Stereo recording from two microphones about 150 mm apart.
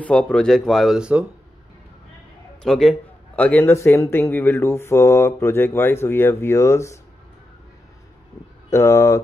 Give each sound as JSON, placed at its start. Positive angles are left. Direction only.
{"t": 0.0, "sound": "speech", "side_deg": 10}
{"t": 2.6, "sound": "a man's voice", "side_deg": 5}
{"t": 8.6, "sound": "speech", "side_deg": 20}